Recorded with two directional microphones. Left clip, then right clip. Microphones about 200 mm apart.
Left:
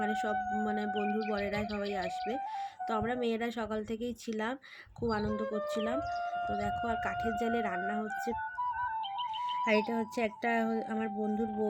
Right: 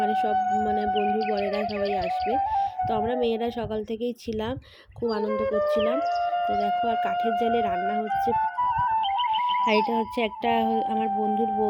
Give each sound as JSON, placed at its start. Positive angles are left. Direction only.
{"t": 0.0, "sound": "a sound", "side_deg": -15}
{"t": 0.9, "sound": "speech", "side_deg": -45}
{"t": 2.9, "sound": "speech", "side_deg": -15}
{"t": 5.5, "sound": "speech", "side_deg": -45}
{"t": 6.8, "sound": "speech", "side_deg": -15}
{"t": 8.3, "sound": "music", "side_deg": -45}
{"t": 9.7, "sound": "speech", "side_deg": -15}
{"t": 10.9, "sound": "speech", "side_deg": -30}